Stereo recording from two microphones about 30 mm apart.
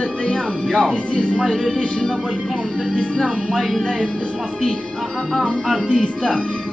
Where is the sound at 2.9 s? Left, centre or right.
Left.